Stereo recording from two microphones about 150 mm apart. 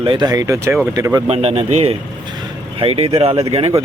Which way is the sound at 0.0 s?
30° right (ahead or behind).